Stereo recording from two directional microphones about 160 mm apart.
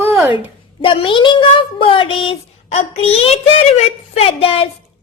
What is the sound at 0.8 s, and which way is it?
A woman's voice, 35° left (ahead or behind).